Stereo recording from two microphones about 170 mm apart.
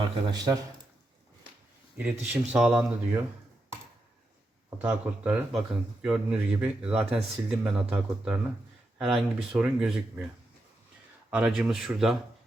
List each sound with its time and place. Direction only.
0.3 s speech: 20° right (ahead or behind)
2.0 s speech: 10° right (ahead or behind)
4.8 s speech: 5° right (ahead or behind)
11.3 s speech: 5° right (ahead or behind)